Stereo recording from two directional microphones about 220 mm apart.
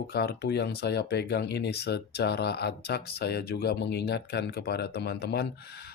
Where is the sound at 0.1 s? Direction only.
45° left (ahead or behind).